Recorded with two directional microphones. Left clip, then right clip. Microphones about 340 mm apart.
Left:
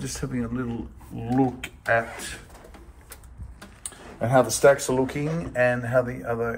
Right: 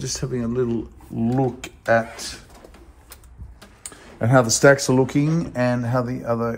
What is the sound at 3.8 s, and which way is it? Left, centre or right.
Speech, right.